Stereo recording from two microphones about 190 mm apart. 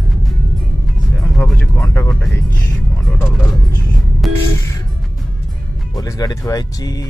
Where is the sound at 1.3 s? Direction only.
5° left (ahead or behind).